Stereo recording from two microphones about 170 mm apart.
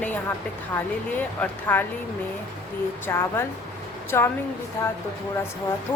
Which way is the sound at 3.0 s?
15° left (ahead or behind).